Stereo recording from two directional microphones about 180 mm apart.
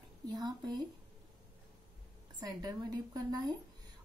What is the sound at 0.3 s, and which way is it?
Speech, 25° right (ahead or behind).